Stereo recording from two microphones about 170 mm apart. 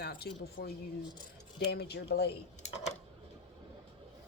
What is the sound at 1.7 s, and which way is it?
Speech, 75° left (ahead or behind).